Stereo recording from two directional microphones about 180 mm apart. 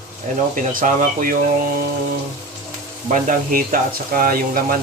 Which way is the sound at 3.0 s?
45° right (ahead or behind).